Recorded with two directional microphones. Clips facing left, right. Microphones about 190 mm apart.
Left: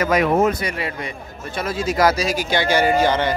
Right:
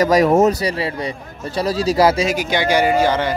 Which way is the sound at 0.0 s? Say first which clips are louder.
Right 4 dB; 40° right (ahead or behind).